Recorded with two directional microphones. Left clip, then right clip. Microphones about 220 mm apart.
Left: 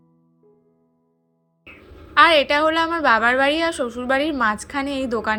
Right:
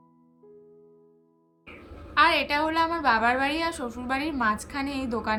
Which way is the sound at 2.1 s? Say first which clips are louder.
Left 7 dB; 15° left (ahead or behind).